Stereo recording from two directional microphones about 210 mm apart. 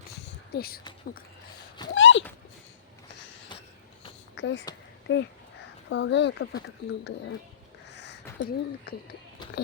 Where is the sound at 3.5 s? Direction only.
20° left (ahead or behind).